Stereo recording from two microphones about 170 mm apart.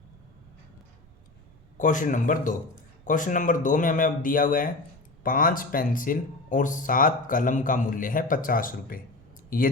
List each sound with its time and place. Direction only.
1.8 s speech: 50° left (ahead or behind)